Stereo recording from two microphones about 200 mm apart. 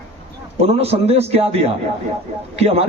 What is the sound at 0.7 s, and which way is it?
Speech, 30° right (ahead or behind).